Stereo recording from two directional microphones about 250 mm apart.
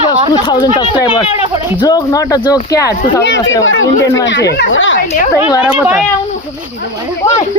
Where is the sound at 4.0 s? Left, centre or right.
Centre.